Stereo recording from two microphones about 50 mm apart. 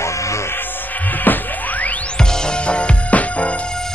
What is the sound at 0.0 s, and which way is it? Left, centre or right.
Music, left.